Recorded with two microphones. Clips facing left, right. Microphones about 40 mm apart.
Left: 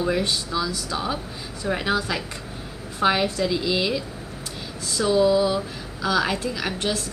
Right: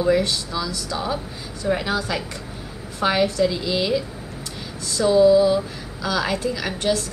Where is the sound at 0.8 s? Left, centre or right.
Centre.